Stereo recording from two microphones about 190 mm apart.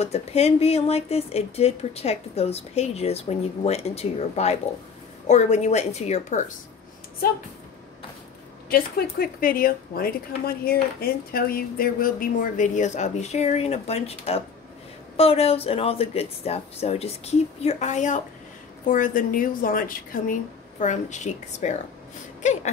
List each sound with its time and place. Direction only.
0.0 s speech: 35° left (ahead or behind)
8.6 s speech: 55° left (ahead or behind)